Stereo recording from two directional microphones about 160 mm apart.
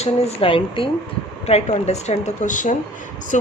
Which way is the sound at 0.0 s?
40° left (ahead or behind).